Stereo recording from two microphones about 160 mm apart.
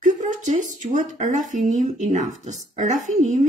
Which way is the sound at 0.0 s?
50° right (ahead or behind).